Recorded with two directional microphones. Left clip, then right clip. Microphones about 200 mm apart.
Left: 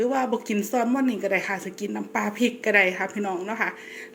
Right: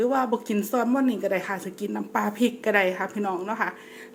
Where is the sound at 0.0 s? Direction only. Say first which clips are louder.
Even; centre (ahead or behind).